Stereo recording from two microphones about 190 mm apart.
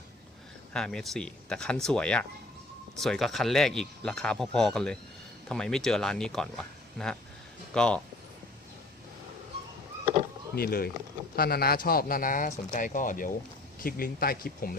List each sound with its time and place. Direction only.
0.7 s speech: 5° left (ahead or behind)
10.5 s speech: 50° left (ahead or behind)